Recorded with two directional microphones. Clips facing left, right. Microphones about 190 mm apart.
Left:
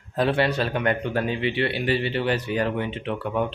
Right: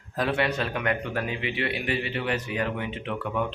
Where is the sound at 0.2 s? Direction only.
30° left (ahead or behind).